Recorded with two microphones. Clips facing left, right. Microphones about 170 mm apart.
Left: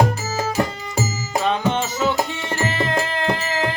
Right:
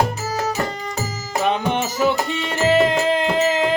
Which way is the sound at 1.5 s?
15° right (ahead or behind).